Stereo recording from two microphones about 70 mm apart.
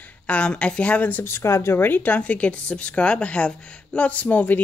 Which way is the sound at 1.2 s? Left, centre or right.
Left.